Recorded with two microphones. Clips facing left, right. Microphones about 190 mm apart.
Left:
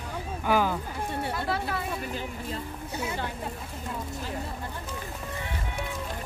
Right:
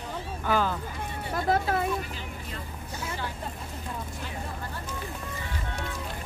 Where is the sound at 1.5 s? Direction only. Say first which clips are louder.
Right 7 dB; 45° right (ahead or behind).